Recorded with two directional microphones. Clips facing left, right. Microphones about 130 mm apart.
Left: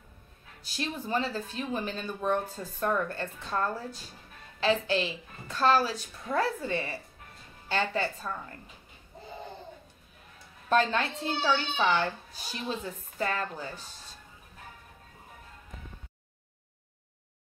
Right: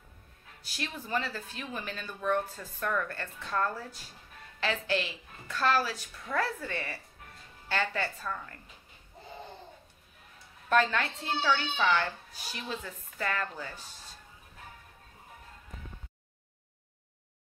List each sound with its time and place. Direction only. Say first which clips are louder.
0.7 s speech: left 3 dB; 25° left (ahead or behind)
10.7 s speech: left 1 dB; 25° left (ahead or behind)